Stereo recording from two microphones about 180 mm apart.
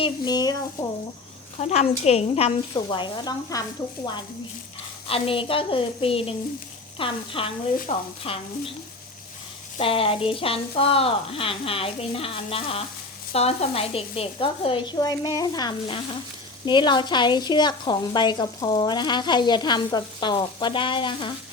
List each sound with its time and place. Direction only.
0.0 s speech: 20° left (ahead or behind)
1.6 s speech: 35° left (ahead or behind)
2.7 s speech: 25° left (ahead or behind)
5.0 s speech: 30° left (ahead or behind)
9.7 s speech: 30° left (ahead or behind)